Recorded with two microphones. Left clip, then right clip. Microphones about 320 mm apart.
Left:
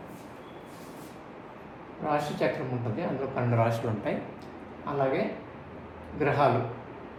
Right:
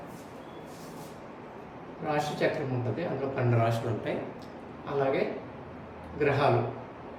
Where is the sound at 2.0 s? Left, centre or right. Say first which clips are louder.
Left 1 dB; centre.